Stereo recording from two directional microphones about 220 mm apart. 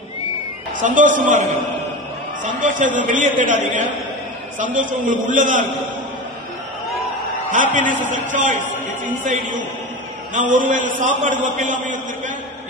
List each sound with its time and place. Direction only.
0.7 s a man's voice: 35° right (ahead or behind)
2.4 s a man's voice: 35° right (ahead or behind)
7.5 s a man's voice: 35° right (ahead or behind)